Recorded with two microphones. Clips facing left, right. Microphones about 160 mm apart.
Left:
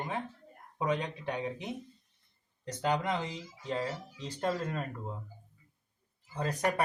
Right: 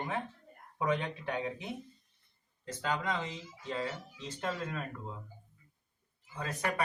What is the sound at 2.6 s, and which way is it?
Speech, 35° left (ahead or behind).